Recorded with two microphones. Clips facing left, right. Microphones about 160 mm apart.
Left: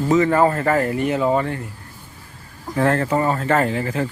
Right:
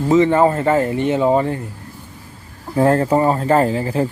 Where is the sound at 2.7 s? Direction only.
30° right (ahead or behind).